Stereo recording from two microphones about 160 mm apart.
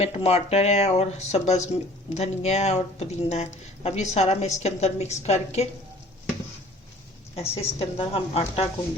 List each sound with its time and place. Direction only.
0.0 s a woman's voice: 40° left (ahead or behind)
7.3 s speech: 40° left (ahead or behind)